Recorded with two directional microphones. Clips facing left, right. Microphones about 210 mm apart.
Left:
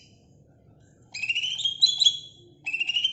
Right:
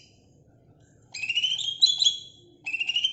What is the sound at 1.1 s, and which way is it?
Music, centre (ahead or behind).